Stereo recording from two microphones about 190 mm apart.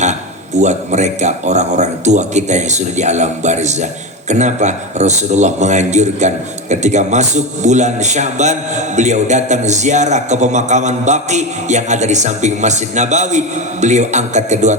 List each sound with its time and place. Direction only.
0.6 s a man's voice: 40° right (ahead or behind)